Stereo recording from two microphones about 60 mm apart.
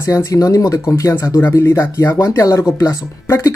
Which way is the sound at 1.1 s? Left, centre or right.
Left.